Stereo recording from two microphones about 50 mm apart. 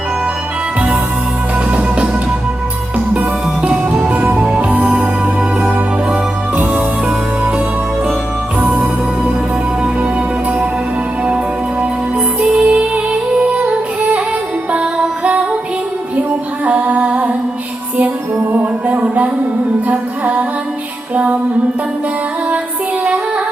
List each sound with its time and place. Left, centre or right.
3.2 s music: right
4.2 s music: right
4.4 s music: right
8.6 s music: right
12.4 s music: right
16.6 s music: right
18.3 s music: right